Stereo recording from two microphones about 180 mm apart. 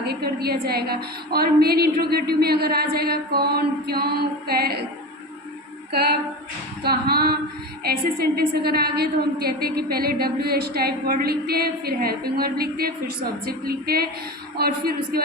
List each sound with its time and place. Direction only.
0.0 s a woman's voice: 60° right (ahead or behind)
5.9 s a woman's voice: 60° right (ahead or behind)